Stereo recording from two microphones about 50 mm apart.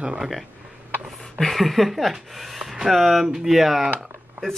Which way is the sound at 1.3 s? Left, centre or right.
Centre.